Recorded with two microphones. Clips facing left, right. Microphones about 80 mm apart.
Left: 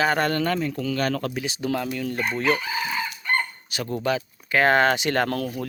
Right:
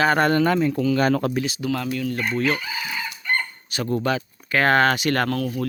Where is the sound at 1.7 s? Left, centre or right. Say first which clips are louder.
Right 1 dB; centre.